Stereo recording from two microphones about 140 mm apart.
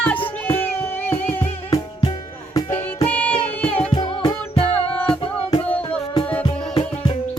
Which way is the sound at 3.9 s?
35° left (ahead or behind).